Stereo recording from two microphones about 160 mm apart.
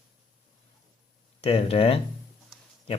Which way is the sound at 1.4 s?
40° left (ahead or behind).